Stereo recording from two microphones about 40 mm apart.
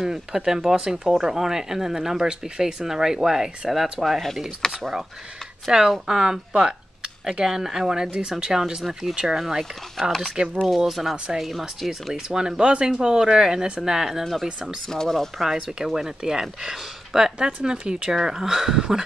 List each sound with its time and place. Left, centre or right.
0.0 s speech: centre
1.0 s speech: centre
4.6 s speech: centre
5.7 s speech: centre
10.0 s speech: centre
10.4 s speech: right
10.9 s speech: centre
12.3 s speech: centre
14.9 s speech: centre
15.4 s speech: centre